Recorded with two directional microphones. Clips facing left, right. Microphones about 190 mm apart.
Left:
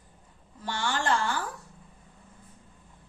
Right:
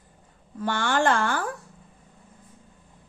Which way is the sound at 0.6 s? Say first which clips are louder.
Right 7 dB; 55° right (ahead or behind).